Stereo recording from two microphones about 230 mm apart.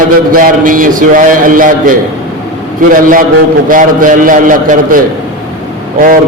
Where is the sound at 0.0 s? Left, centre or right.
Right.